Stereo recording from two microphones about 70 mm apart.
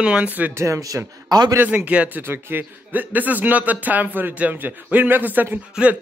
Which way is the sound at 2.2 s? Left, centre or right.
Right.